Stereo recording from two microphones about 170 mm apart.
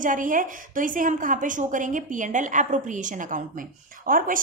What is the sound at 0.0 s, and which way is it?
A woman's voice, 50° right (ahead or behind).